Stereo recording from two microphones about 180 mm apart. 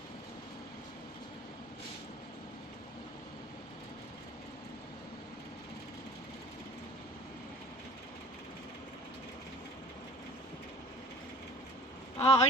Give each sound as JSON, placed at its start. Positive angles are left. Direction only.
{"t": 12.2, "sound": "speech", "side_deg": 35}